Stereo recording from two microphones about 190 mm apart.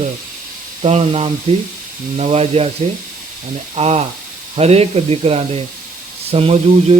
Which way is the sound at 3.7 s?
30° right (ahead or behind).